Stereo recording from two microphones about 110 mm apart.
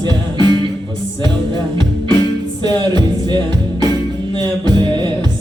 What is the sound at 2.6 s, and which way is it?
Music, 40° right (ahead or behind).